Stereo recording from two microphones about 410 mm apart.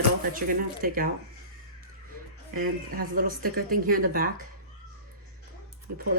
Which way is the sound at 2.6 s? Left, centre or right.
Centre.